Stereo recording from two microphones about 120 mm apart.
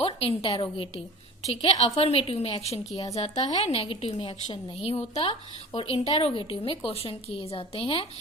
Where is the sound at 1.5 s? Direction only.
60° left (ahead or behind).